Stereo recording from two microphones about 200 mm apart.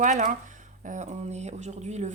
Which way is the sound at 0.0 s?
40° right (ahead or behind).